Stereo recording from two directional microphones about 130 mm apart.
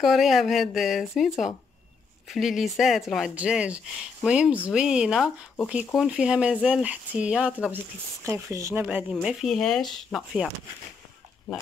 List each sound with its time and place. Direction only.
0.0 s speech: centre (ahead or behind)
8.3 s speech: 25° right (ahead or behind)
8.8 s speech: 5° right (ahead or behind)